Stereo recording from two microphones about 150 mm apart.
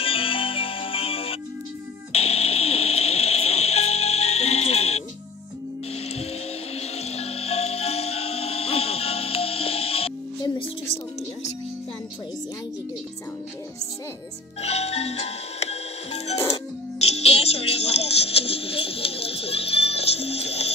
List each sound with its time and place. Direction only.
0.0 s music: 35° left (ahead or behind)
6.8 s music: 45° left (ahead or behind)
14.6 s music: 45° left (ahead or behind)